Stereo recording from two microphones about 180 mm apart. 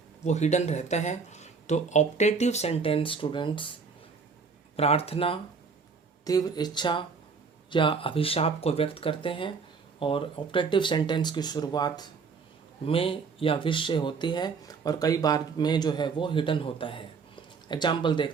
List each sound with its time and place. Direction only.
0.3 s speech: 40° left (ahead or behind)
4.8 s speech: 35° left (ahead or behind)
6.2 s speech: 20° left (ahead or behind)